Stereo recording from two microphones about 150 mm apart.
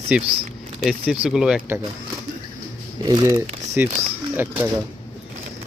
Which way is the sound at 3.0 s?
30° right (ahead or behind).